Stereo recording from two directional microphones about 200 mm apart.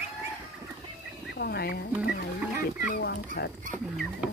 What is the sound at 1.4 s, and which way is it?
Speech, 55° left (ahead or behind).